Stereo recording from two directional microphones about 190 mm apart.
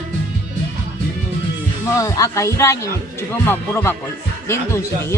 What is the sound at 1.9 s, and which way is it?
Speech, 15° left (ahead or behind).